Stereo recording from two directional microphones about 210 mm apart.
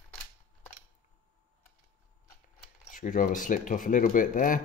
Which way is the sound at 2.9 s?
40° left (ahead or behind).